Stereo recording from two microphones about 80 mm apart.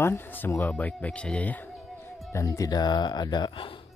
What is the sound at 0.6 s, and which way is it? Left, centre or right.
Speech, centre.